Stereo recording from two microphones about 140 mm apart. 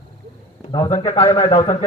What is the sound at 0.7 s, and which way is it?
A man's voice, 30° left (ahead or behind).